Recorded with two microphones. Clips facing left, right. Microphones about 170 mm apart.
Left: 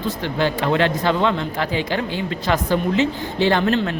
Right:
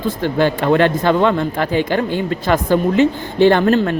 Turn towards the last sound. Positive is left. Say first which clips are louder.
# right 5 dB
turn(degrees=-45)  # may be behind; listen again after turning